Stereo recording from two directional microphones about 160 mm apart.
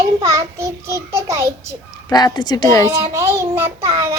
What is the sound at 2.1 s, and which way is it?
Speech, 25° left (ahead or behind).